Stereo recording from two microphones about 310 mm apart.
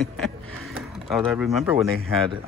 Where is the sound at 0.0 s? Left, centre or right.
Centre.